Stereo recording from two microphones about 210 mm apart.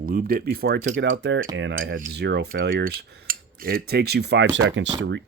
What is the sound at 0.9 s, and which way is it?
Speech, 60° right (ahead or behind).